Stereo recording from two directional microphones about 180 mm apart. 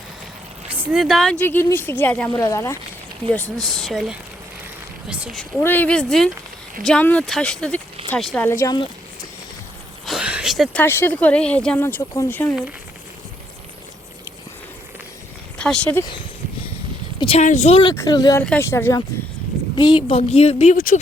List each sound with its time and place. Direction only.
0.7 s speech: 10° right (ahead or behind); by 2.7 s 15° left (ahead or behind)
3.3 s speech: 5° left (ahead or behind)
8.6 s speech: 25° left (ahead or behind)
10.1 s a sound: 5° right (ahead or behind)
10.8 s speech: 10° left (ahead or behind)
15.5 s speech: 5° left (ahead or behind)
17.2 s a sound: 30° left (ahead or behind)
17.4 s a woman's voice: 40° left (ahead or behind)
17.9 s a woman's voice: 20° left (ahead or behind); by 21.0 s 45° left (ahead or behind)